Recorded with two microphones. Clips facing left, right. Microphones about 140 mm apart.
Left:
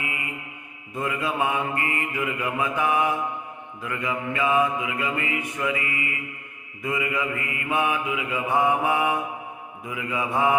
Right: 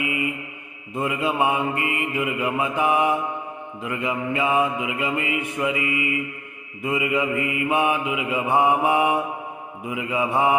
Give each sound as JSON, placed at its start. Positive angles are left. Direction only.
{"t": 0.9, "sound": "mantra", "side_deg": -20}